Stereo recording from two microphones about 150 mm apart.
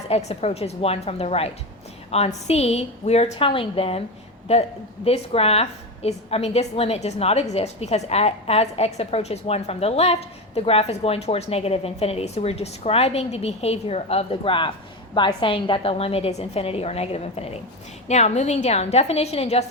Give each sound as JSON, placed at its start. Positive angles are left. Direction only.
{"t": 0.1, "sound": "a woman's voice", "side_deg": 45}